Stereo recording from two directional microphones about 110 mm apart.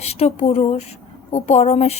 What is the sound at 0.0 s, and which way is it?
A woman's voice, 70° left (ahead or behind).